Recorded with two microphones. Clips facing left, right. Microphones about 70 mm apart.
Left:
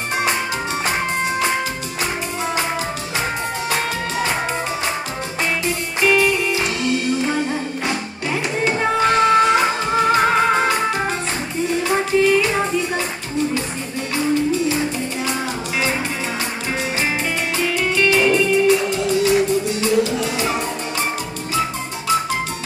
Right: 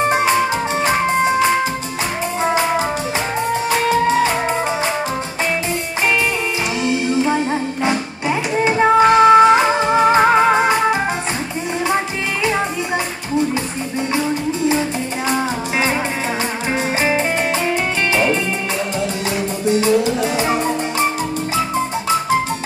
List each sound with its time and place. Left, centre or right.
7.8 s music: right
17.6 s music: right
19.2 s music: right